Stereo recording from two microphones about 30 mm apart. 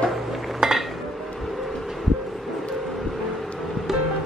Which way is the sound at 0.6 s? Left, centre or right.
Right.